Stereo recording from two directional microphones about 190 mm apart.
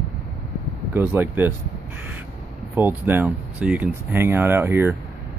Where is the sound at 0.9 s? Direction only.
10° right (ahead or behind).